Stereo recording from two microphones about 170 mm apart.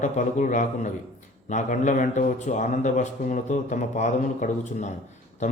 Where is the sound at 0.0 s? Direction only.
45° left (ahead or behind).